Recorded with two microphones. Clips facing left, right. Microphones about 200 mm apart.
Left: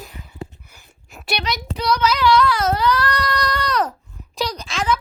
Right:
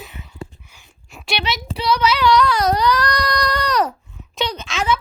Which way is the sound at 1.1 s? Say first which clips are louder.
Right 1 dB; centre (ahead or behind).